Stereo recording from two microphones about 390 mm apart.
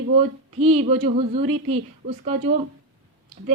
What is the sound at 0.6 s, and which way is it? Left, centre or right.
A woman's voice, centre.